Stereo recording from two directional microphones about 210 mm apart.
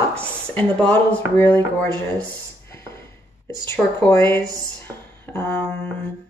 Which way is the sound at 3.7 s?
10° left (ahead or behind).